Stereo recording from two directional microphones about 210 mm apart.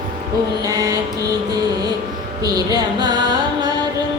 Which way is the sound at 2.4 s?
20° right (ahead or behind).